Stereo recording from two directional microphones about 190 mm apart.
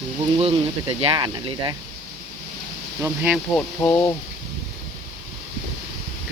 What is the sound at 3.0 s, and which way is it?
Speech, 10° right (ahead or behind).